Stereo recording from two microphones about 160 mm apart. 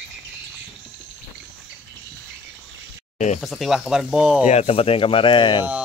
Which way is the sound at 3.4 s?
Centre (ahead or behind).